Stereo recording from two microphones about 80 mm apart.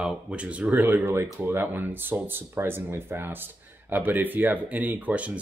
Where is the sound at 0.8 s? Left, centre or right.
Right.